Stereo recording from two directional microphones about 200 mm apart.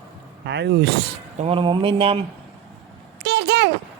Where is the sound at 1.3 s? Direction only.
30° right (ahead or behind).